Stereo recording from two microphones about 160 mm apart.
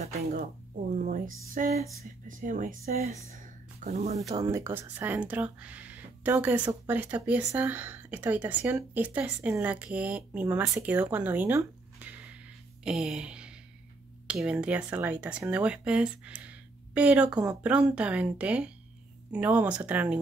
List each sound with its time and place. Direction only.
0.9 s a sound: 55° right (ahead or behind)
1.5 s speech: 55° right (ahead or behind)
4.3 s speech: 20° right (ahead or behind)